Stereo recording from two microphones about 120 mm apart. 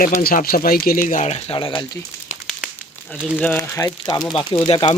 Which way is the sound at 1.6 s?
45° left (ahead or behind).